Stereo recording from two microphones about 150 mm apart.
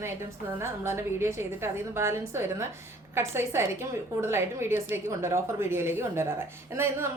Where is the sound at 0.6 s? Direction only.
15° right (ahead or behind).